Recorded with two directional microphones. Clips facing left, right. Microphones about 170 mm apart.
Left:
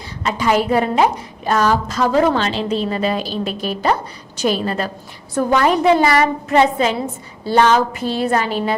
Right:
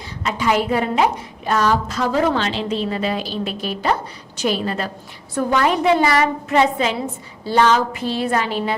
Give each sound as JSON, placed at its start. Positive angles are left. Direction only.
{"t": 0.2, "sound": "a woman's voice", "side_deg": 40}